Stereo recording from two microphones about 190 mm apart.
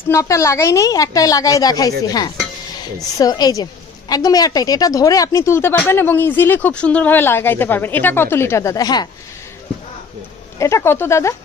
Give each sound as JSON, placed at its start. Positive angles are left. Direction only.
{"t": 0.1, "sound": "a woman's voice", "side_deg": 15}
{"t": 10.6, "sound": "a woman's voice", "side_deg": 15}